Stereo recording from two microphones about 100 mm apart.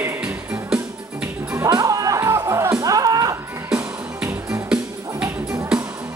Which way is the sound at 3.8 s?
25° right (ahead or behind).